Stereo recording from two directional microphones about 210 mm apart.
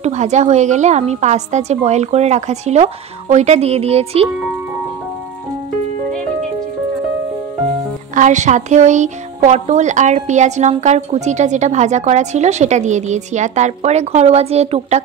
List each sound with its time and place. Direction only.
0.0 s speech: 35° right (ahead or behind)
8.1 s speech: 35° right (ahead or behind)